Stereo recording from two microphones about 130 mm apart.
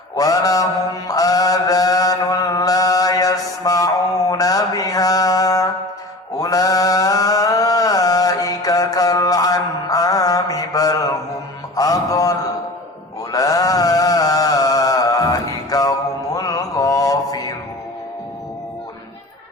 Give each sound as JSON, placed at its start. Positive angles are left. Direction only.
{"t": 0.2, "sound": "mantra", "side_deg": 30}
{"t": 13.3, "sound": "chant", "side_deg": 25}